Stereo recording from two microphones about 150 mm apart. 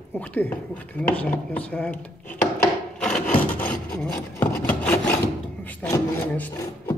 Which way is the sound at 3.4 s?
10° left (ahead or behind).